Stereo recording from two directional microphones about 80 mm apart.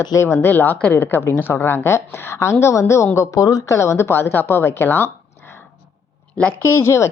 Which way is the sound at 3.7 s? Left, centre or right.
Left.